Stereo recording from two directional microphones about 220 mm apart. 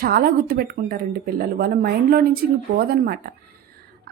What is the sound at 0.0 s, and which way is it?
Speech, 45° right (ahead or behind).